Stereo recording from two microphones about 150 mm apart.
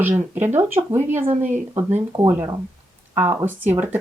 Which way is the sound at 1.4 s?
55° right (ahead or behind).